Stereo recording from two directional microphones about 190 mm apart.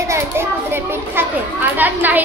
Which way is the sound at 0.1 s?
15° right (ahead or behind).